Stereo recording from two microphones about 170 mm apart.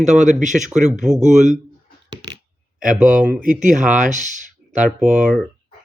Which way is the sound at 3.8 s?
50° right (ahead or behind).